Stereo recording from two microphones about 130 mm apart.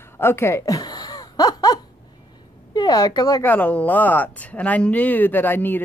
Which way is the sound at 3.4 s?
15° left (ahead or behind).